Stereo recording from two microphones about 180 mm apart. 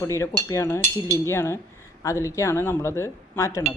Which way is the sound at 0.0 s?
15° left (ahead or behind).